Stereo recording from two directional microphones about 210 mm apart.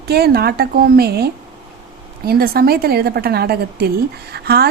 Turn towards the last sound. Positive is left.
turn(degrees=-50)  # may be behind; listen again after turning